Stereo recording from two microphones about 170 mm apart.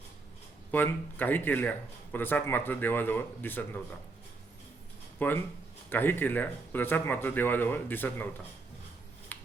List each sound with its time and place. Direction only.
0.7 s speech: 10° left (ahead or behind)
5.2 s speech: 10° left (ahead or behind)
9.3 s scissors: 10° left (ahead or behind)